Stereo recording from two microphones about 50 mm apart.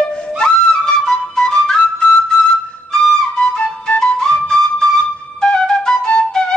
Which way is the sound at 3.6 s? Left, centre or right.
Centre.